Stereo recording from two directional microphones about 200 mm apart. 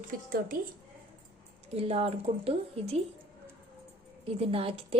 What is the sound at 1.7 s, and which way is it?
A woman's voice, 30° right (ahead or behind).